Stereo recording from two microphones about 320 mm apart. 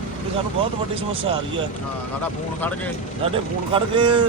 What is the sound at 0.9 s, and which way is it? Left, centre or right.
Speech, centre.